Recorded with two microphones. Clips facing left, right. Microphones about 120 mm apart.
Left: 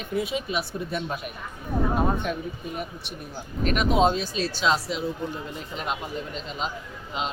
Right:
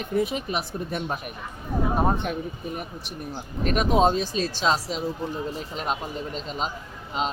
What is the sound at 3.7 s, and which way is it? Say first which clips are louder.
Speech: right 1 dB; 40° right (ahead or behind).